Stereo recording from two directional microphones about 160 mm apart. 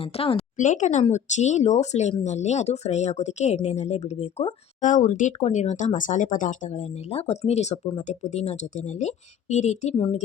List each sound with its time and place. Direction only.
0.0 s speech: 35° left (ahead or behind)